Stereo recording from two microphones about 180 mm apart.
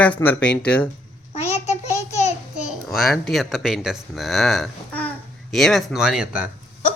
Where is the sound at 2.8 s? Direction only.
Centre (ahead or behind).